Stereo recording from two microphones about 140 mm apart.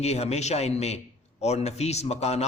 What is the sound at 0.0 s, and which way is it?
A man's voice, 50° left (ahead or behind).